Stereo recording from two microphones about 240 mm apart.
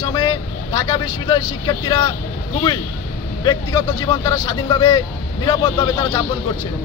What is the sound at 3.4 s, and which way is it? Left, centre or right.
A man's voice, centre.